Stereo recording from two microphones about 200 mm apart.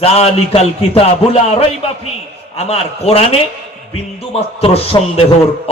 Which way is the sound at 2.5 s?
30° left (ahead or behind).